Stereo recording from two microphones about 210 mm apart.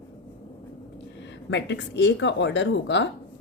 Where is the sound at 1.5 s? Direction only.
55° left (ahead or behind).